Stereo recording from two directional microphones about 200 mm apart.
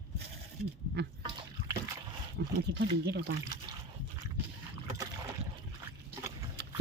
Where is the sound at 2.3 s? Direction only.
60° right (ahead or behind).